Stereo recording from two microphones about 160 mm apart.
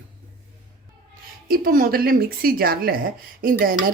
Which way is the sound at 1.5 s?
65° right (ahead or behind).